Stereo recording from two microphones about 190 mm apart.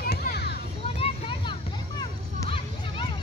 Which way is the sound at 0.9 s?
30° left (ahead or behind).